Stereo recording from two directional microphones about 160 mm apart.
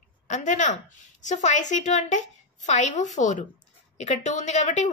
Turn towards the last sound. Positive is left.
turn(degrees=45)  # may be behind; listen again after turning